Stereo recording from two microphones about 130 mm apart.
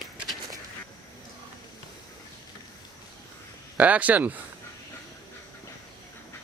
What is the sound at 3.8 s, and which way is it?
Speech, 10° right (ahead or behind).